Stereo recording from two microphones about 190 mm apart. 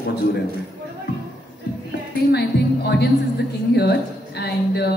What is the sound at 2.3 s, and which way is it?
A man's voice, 60° left (ahead or behind).